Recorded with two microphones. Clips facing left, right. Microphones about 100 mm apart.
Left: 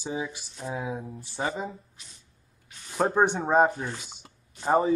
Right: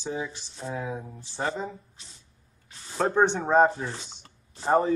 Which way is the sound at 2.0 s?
30° right (ahead or behind).